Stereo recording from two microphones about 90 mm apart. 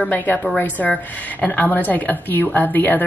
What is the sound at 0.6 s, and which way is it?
Speech, 20° left (ahead or behind).